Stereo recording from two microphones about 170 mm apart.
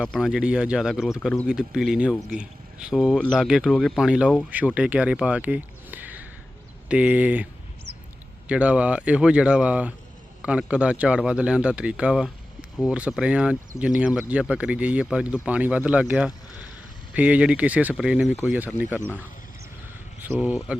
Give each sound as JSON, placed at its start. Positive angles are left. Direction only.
{"t": 0.0, "sound": "speech", "side_deg": 0}
{"t": 8.4, "sound": "speech", "side_deg": -5}
{"t": 20.2, "sound": "speech", "side_deg": -10}